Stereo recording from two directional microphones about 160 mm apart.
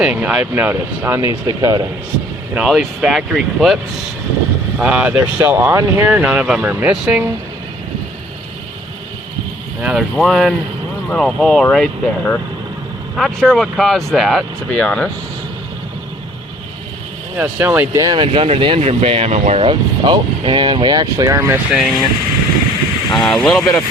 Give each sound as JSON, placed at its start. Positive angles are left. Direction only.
{"t": 0.0, "sound": "speech", "side_deg": -10}
{"t": 2.6, "sound": "speech", "side_deg": -5}
{"t": 4.8, "sound": "speech", "side_deg": -10}
{"t": 9.8, "sound": "speech", "side_deg": 0}
{"t": 17.3, "sound": "speech", "side_deg": -10}
{"t": 18.0, "sound": "speech", "side_deg": -25}
{"t": 18.3, "sound": "speech", "side_deg": -40}
{"t": 21.7, "sound": "speech", "side_deg": 0}
{"t": 23.1, "sound": "speech", "side_deg": 5}